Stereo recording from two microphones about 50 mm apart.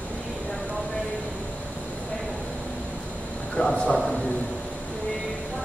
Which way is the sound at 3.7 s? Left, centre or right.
Left.